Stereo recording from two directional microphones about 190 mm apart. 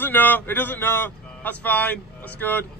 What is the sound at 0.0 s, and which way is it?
A man's voice, 10° left (ahead or behind).